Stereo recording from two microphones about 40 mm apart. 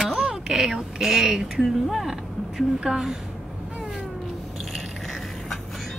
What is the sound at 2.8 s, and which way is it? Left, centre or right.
Speech, centre.